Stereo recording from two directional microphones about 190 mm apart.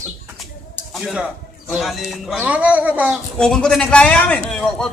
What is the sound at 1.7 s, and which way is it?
A man's voice, centre (ahead or behind).